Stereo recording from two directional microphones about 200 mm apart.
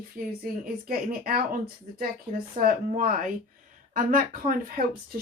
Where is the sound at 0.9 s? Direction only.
45° right (ahead or behind).